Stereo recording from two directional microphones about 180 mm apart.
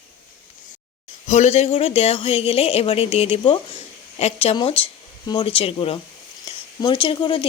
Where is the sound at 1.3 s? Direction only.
40° left (ahead or behind).